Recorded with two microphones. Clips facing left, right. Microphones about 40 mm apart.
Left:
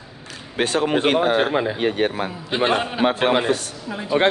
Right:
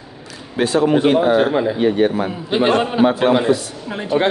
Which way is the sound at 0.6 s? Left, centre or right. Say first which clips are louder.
Right 5 dB; left.